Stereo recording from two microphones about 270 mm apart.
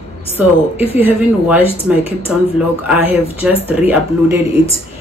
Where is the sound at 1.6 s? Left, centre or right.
Left.